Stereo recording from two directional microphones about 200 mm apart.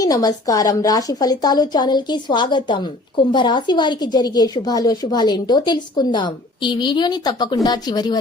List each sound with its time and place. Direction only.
0.0 s a woman's voice: 20° left (ahead or behind)